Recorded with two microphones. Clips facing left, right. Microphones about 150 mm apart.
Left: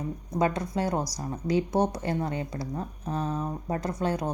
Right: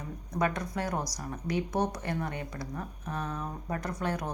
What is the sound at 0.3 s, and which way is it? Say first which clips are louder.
Speech: left 4 dB; 25° left (ahead or behind).